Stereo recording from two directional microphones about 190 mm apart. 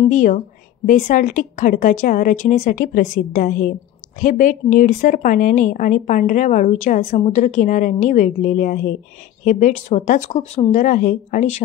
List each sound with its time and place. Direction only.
0.0 s a woman's voice: 40° left (ahead or behind)